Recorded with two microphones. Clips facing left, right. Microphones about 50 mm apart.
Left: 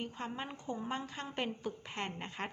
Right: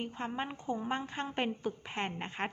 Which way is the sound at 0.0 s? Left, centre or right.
Right.